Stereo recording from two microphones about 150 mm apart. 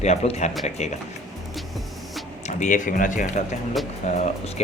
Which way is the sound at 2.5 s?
55° left (ahead or behind).